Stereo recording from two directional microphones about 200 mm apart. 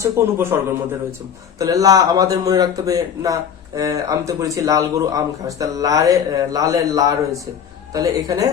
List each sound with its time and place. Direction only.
0.0 s speech: 15° right (ahead or behind)